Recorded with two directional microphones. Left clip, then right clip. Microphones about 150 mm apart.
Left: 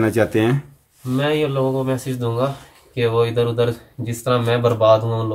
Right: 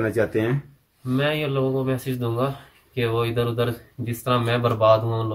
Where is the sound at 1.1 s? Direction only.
5° left (ahead or behind).